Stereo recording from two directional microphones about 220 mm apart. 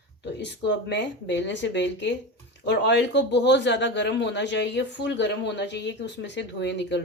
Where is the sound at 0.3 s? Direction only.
50° left (ahead or behind).